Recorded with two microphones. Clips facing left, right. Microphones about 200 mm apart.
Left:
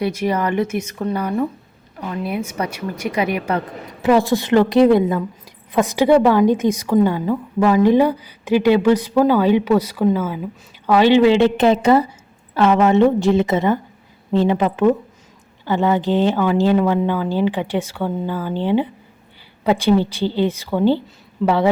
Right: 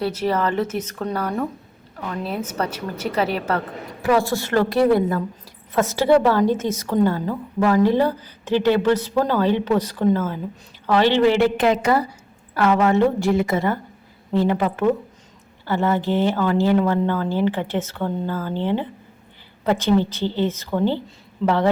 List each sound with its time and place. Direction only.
0.0 s a woman's voice: 15° left (ahead or behind)